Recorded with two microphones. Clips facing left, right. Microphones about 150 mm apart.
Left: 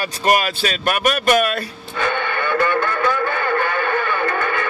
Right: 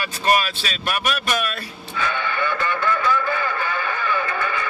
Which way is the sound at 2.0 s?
60° left (ahead or behind).